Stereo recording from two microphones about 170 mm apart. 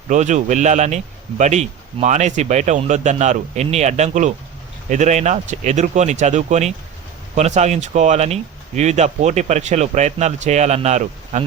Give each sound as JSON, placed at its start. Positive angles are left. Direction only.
{"t": 0.1, "sound": "speech", "side_deg": -45}